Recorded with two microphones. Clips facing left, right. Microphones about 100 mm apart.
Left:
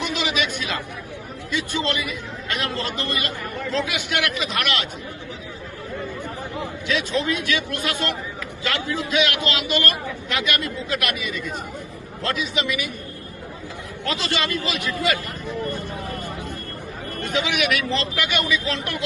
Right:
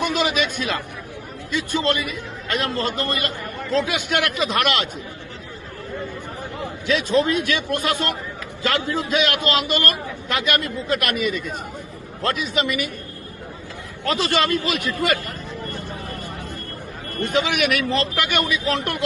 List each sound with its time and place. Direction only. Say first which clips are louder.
0.0 s a man's voice: right 3 dB; 45° right (ahead or behind)
6.9 s a man's voice: right 5 dB; 45° right (ahead or behind)
14.0 s a man's voice: right 5 dB; 45° right (ahead or behind)
17.2 s a man's voice: right 3 dB; 50° right (ahead or behind)